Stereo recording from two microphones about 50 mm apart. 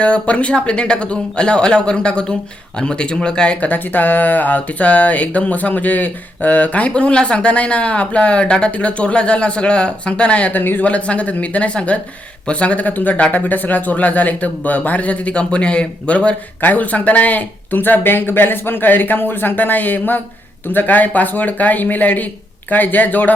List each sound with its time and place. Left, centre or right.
0.0 s speech: left
3.7 s speech: left
10.5 s speech: left
10.8 s speech: left
16.6 s speech: left